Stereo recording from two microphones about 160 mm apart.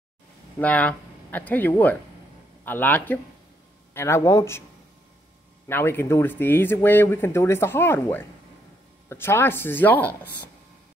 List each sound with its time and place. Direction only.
0.6 s speech: 10° left (ahead or behind)
5.7 s speech: 15° left (ahead or behind)